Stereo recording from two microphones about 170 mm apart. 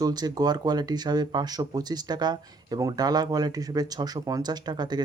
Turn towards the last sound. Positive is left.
turn(degrees=-25)  # may be behind; listen again after turning